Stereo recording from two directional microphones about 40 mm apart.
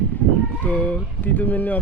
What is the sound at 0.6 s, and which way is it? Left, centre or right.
Speech, left.